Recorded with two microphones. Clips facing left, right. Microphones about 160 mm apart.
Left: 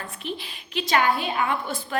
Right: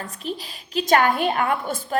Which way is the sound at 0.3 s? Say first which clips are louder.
Right 3 dB; 40° right (ahead or behind).